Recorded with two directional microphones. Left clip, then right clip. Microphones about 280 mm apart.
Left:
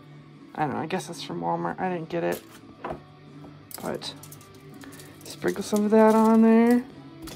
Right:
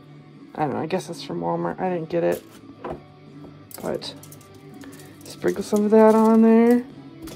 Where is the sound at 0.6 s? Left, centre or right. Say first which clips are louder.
Right 3 dB; centre.